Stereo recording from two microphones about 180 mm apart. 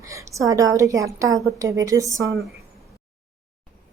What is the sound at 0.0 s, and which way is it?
A woman's voice, 15° right (ahead or behind).